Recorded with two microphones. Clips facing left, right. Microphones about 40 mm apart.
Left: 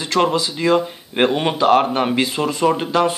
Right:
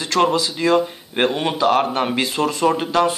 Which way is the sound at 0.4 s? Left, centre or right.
Centre.